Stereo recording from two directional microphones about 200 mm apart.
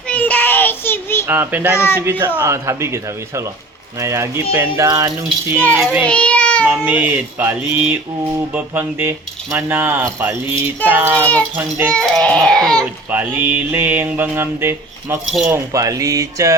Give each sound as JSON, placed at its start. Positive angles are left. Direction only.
{"t": 0.1, "sound": "child singing", "side_deg": 5}
{"t": 1.3, "sound": "mantra", "side_deg": -10}
{"t": 6.1, "sound": "a sound", "side_deg": 5}
{"t": 6.7, "sound": "mantra", "side_deg": -10}
{"t": 11.9, "sound": "crying", "side_deg": 5}
{"t": 13.1, "sound": "mantra", "side_deg": -10}
{"t": 15.3, "sound": "crying", "side_deg": 0}
{"t": 15.5, "sound": "mantra", "side_deg": -15}